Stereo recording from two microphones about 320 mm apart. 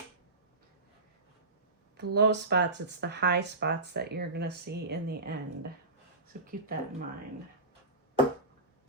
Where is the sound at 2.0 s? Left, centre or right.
Right.